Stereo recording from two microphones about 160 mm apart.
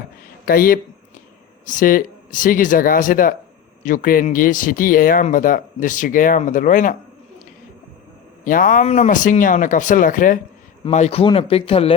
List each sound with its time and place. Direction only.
0.4 s speech: 65° left (ahead or behind)
8.4 s speech: 60° left (ahead or behind)
10.8 s speech: 40° left (ahead or behind)